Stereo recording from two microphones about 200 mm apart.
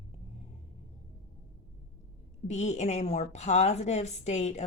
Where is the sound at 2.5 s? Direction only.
35° left (ahead or behind).